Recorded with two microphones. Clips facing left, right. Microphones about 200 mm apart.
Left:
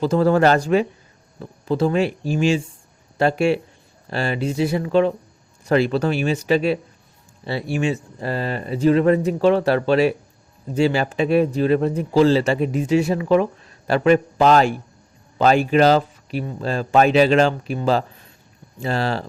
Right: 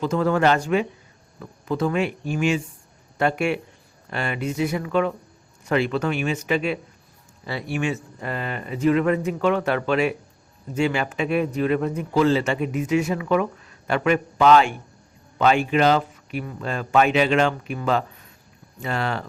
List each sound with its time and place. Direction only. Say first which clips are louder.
0.0 s a man's voice: left 4 dB; 35° left (ahead or behind)